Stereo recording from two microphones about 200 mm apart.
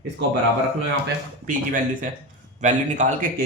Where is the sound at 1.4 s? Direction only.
40° right (ahead or behind).